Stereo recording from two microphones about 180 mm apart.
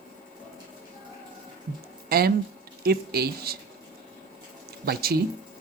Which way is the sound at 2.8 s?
60° right (ahead or behind).